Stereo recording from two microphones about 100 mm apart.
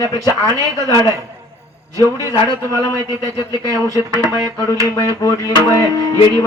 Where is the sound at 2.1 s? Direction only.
35° left (ahead or behind).